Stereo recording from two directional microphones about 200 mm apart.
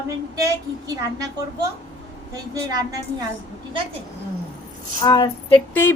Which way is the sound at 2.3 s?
20° right (ahead or behind).